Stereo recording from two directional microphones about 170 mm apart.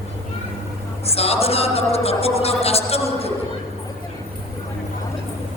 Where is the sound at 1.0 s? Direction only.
35° left (ahead or behind).